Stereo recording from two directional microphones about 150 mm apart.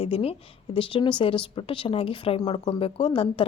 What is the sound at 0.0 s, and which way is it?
A woman's voice, 40° left (ahead or behind).